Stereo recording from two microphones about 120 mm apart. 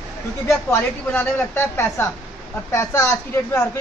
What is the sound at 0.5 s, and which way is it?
A woman's voice, 20° left (ahead or behind).